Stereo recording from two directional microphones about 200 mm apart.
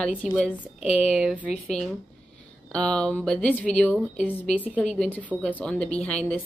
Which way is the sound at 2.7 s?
5° left (ahead or behind).